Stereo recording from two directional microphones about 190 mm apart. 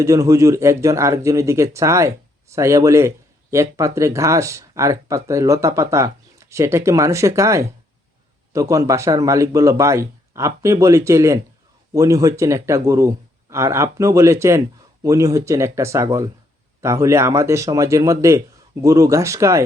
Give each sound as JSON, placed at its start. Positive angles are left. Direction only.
{"t": 0.0, "sound": "speech", "side_deg": -15}